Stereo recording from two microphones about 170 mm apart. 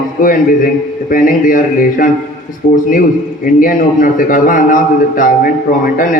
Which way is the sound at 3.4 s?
50° left (ahead or behind).